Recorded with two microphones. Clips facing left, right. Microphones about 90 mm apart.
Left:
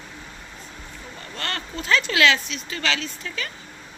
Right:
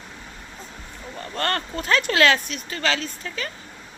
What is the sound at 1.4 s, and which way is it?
Speech, 50° right (ahead or behind).